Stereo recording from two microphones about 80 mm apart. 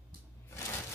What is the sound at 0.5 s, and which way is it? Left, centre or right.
Shuffling cards, left.